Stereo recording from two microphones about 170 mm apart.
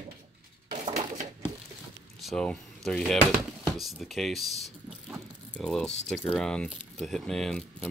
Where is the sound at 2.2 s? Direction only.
5° left (ahead or behind).